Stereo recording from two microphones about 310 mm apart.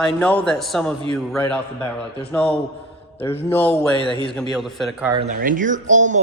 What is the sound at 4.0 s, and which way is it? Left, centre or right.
Speech, centre.